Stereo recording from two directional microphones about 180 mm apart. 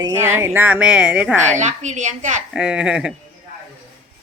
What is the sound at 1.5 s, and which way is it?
Speech, 40° right (ahead or behind).